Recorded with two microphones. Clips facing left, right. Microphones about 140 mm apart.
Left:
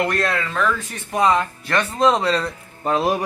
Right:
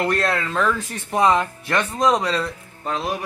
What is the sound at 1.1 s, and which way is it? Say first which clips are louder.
Speech: even; 20° right (ahead or behind).